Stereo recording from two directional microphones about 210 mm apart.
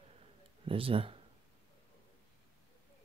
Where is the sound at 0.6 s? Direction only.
25° right (ahead or behind).